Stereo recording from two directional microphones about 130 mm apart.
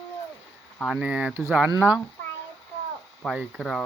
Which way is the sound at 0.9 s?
10° right (ahead or behind).